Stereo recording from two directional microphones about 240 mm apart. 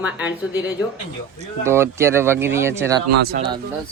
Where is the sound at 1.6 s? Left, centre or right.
Centre.